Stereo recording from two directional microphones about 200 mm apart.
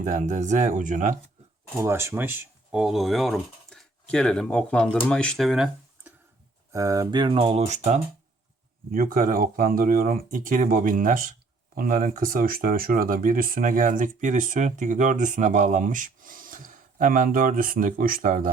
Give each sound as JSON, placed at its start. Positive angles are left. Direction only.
{"t": 0.0, "sound": "speech", "side_deg": -40}
{"t": 1.8, "sound": "speech", "side_deg": -15}
{"t": 6.7, "sound": "speech", "side_deg": -15}
{"t": 8.9, "sound": "speech", "side_deg": -45}